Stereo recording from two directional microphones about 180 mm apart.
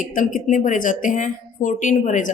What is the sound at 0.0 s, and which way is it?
A woman's voice, 45° left (ahead or behind).